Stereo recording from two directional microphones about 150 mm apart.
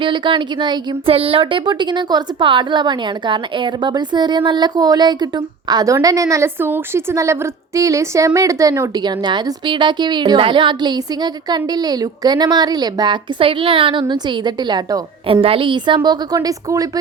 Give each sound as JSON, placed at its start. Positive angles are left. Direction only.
{"t": 0.0, "sound": "a woman's voice", "side_deg": -35}
{"t": 15.3, "sound": "a woman's voice", "side_deg": -40}